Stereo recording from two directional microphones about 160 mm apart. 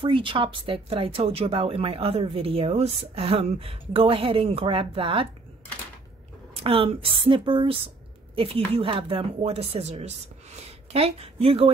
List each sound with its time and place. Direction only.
0.0 s speech: 30° right (ahead or behind)
6.5 s speech: 35° right (ahead or behind)